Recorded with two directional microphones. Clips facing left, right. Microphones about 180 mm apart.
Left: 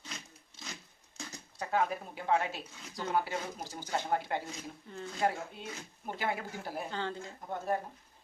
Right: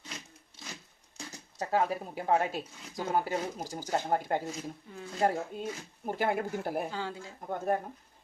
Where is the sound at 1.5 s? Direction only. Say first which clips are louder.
Right 3 dB; 35° right (ahead or behind).